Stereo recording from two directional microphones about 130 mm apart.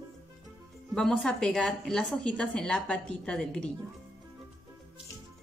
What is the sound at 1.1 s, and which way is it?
A woman's voice, 5° left (ahead or behind).